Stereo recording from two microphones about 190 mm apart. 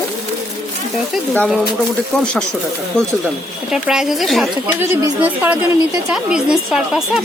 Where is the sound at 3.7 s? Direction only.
5° right (ahead or behind).